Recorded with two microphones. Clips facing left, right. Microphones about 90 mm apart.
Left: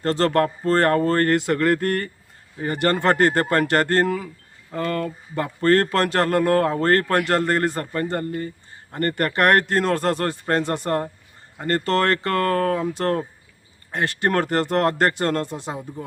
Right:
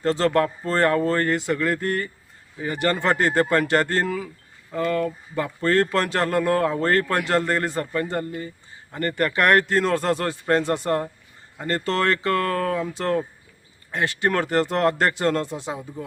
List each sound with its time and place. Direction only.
0.0 s a man's voice: 50° left (ahead or behind)